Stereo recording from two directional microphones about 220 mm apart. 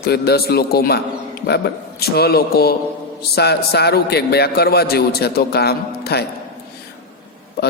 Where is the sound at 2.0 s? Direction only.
45° left (ahead or behind).